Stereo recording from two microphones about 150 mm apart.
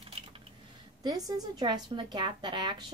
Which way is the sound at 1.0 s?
25° right (ahead or behind).